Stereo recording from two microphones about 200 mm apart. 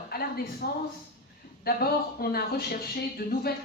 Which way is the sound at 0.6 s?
50° left (ahead or behind).